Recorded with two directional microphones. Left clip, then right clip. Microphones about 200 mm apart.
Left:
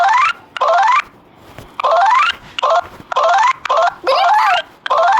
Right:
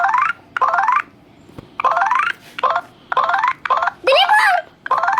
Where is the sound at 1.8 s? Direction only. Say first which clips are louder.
Left 4 dB; 50° left (ahead or behind).